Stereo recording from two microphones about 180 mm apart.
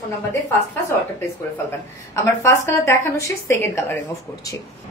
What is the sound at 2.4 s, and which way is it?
A woman's voice, 15° left (ahead or behind).